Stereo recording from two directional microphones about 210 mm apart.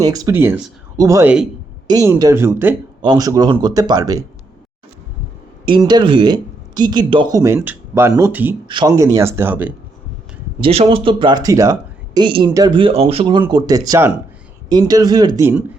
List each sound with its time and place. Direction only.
0.0 s speech: 15° right (ahead or behind)
5.6 s speech: 20° right (ahead or behind)
8.6 s speech: 20° right (ahead or behind)
10.6 s speech: 25° right (ahead or behind)